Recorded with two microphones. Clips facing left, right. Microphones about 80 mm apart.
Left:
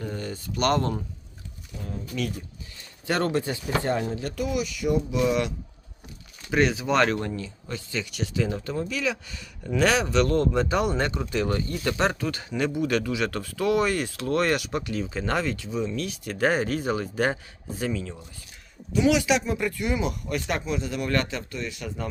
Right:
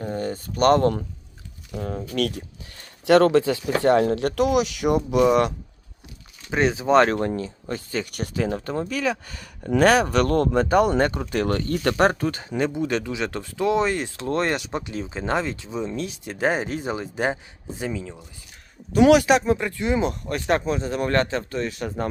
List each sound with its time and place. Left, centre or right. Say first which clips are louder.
0.0 s speech: right 5 dB; right
1.7 s speech: right 6 dB; right
6.5 s speech: right 4 dB; right
18.9 s speech: right 6 dB; right